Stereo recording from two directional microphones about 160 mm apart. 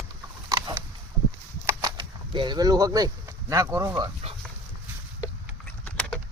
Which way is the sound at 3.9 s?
30° right (ahead or behind).